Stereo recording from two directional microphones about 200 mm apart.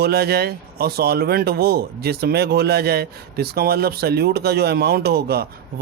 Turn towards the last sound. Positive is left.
turn(degrees=-50)  # may be behind; listen again after turning